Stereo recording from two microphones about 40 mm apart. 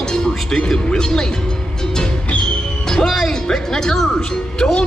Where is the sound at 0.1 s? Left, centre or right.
Centre.